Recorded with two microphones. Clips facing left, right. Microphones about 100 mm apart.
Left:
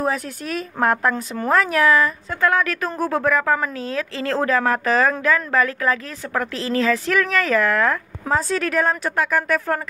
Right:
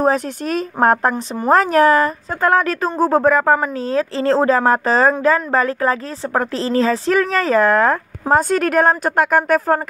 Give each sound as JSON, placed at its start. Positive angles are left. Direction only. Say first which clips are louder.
{"t": 0.0, "sound": "speech", "louder": "right 6 dB", "side_deg": -35}
{"t": 1.1, "sound": "a woman's voice", "louder": "right 3 dB", "side_deg": -20}
{"t": 1.5, "sound": "speech", "louder": "right 5 dB", "side_deg": -35}
{"t": 8.4, "sound": "a woman's voice", "louder": "right 5 dB", "side_deg": -50}